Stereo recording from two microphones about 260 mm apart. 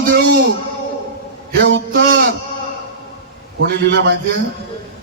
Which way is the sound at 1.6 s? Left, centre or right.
Right.